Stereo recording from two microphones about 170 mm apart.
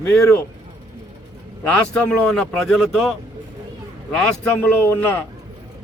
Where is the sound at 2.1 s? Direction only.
5° left (ahead or behind).